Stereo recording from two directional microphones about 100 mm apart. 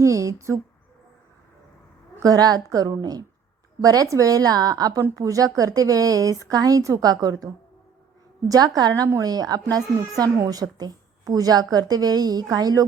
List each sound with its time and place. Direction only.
0.0 s speech: 35° right (ahead or behind)
2.2 s a woman's voice: 40° right (ahead or behind)